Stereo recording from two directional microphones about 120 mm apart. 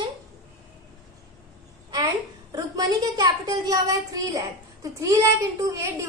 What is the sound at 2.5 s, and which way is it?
A woman's voice, 30° right (ahead or behind).